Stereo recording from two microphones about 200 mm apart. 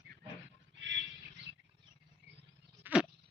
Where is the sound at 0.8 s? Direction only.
65° right (ahead or behind).